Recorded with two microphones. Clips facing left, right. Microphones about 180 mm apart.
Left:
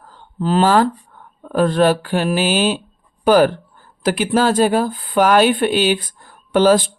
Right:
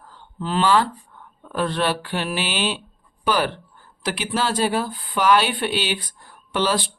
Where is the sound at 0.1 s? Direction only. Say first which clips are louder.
Left 8 dB; 45° left (ahead or behind).